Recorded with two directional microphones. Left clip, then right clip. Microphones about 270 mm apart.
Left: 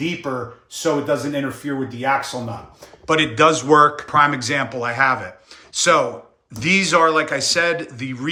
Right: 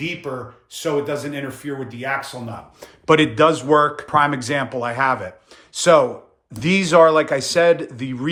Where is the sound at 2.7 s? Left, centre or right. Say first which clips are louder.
Right 3 dB; right.